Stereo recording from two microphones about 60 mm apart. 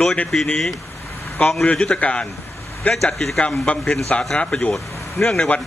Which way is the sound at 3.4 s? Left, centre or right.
Centre.